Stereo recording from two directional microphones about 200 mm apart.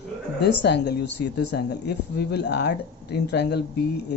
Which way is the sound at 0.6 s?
60° left (ahead or behind).